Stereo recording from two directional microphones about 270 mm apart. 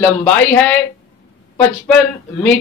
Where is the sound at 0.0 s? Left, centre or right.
Centre.